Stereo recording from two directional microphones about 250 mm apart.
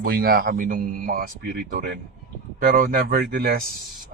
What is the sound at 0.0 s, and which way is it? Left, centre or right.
A man's voice, right.